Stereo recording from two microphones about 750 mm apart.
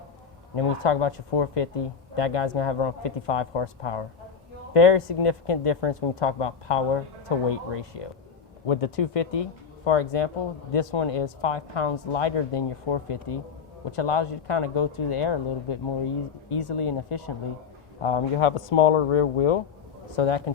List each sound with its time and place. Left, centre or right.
0.5 s speech: left